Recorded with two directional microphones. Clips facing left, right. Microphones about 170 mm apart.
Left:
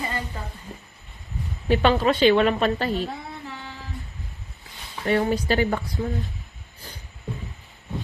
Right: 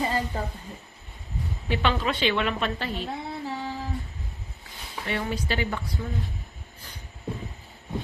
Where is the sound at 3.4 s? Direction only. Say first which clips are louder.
Right 6 dB; 35° right (ahead or behind).